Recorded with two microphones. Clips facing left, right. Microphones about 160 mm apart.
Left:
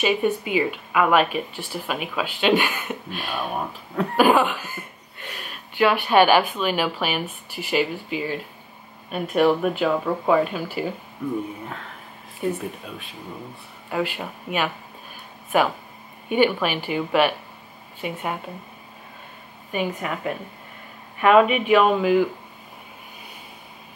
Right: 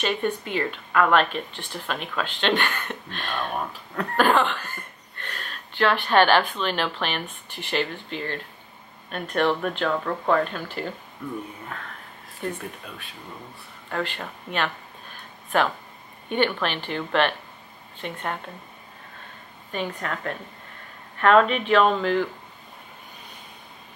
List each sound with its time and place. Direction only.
0.0 s speech: 5° left (ahead or behind)
12.4 s speech: 5° left (ahead or behind)
13.8 s a sound: 10° left (ahead or behind)
16.3 s speech: 10° left (ahead or behind)
19.7 s speech: 10° left (ahead or behind)